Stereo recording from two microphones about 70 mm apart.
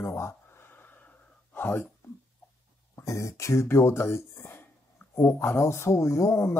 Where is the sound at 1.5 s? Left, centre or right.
Left.